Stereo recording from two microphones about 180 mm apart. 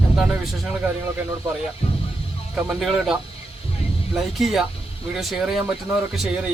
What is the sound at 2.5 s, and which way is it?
Speech, centre (ahead or behind).